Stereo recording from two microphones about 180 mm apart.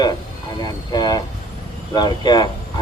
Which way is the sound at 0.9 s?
20° left (ahead or behind).